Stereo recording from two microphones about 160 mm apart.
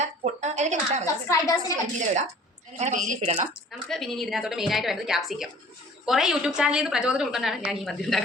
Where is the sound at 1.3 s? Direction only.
20° left (ahead or behind).